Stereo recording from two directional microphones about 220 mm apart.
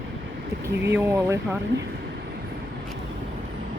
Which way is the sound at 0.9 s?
10° right (ahead or behind).